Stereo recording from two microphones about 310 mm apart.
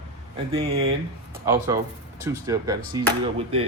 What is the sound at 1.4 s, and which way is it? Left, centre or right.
Speech, centre.